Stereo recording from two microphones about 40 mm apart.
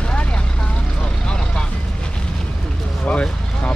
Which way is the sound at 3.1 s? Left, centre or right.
Left.